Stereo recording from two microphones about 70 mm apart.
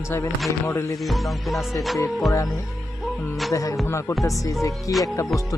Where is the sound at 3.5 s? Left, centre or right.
Left.